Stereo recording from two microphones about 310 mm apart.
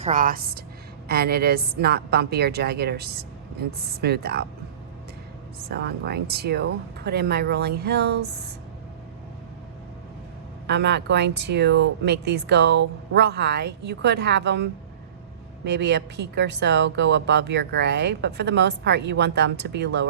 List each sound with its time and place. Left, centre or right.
0.0 s a woman's voice: right
5.6 s a woman's voice: right
10.7 s a woman's voice: right